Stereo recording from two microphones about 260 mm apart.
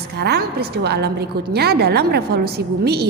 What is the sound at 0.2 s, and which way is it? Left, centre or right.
A woman's voice, right.